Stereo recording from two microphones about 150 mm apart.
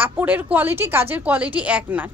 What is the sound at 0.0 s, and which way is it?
A woman's voice, 10° right (ahead or behind).